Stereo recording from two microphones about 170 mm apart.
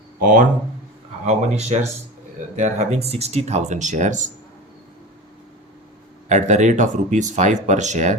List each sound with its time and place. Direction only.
0.2 s speech: 50° right (ahead or behind)
6.2 s speech: 45° right (ahead or behind)